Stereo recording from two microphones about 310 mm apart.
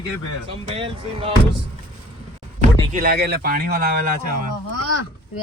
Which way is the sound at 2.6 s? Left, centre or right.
Right.